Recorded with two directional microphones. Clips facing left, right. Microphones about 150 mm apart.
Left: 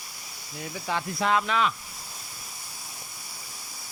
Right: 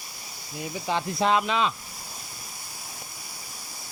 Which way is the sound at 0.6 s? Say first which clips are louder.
Right 3 dB; 20° right (ahead or behind).